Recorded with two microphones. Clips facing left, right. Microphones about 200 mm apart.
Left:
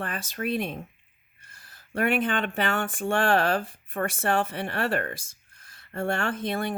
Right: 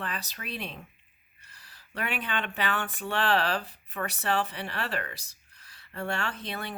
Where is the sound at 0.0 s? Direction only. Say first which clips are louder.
Left 7 dB; 50° left (ahead or behind).